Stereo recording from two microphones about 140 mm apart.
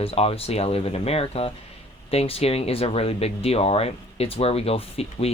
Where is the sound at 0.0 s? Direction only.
45° left (ahead or behind).